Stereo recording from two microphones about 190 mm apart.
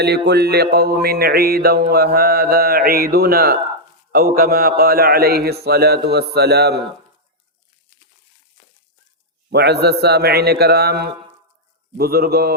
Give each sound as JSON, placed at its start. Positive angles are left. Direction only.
{"t": 0.0, "sound": "music", "side_deg": -60}
{"t": 9.5, "sound": "music", "side_deg": -60}